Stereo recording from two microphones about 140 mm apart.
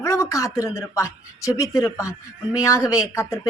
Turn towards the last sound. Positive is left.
turn(degrees=20)  # may be behind; listen again after turning